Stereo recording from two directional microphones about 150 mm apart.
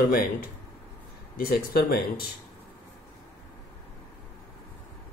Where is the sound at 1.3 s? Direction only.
80° left.